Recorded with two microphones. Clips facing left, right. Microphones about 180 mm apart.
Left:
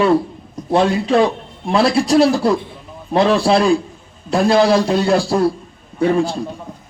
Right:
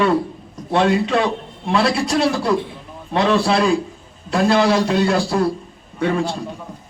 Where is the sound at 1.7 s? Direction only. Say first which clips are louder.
Left 4 dB; 35° left (ahead or behind).